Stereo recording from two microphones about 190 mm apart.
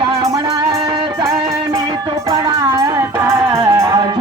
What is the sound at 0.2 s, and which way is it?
Music, 15° right (ahead or behind).